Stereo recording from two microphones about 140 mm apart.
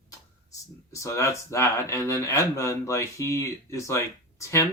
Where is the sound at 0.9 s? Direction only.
20° left (ahead or behind).